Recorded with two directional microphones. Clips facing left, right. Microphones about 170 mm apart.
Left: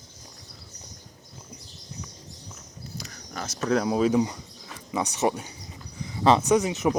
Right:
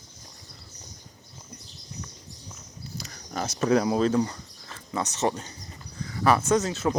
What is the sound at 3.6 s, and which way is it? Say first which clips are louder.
Speech: right 1 dB; centre (ahead or behind).